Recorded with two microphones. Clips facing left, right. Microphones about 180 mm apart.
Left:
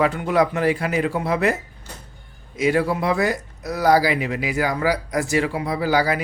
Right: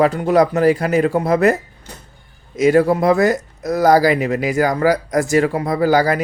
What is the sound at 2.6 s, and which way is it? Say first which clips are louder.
Speech: right 7 dB; 45° right (ahead or behind).